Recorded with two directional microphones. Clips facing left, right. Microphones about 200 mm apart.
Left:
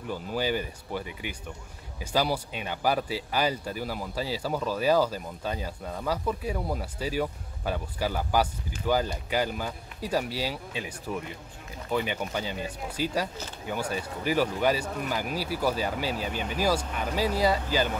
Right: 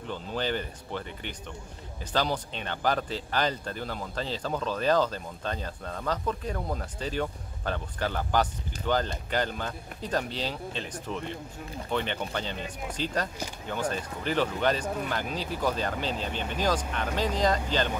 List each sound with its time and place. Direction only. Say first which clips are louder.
0.1 s speech: left 2 dB; 10° left (ahead or behind)